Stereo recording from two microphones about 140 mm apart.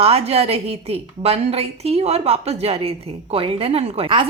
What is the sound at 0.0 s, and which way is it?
A woman's voice, 45° right (ahead or behind).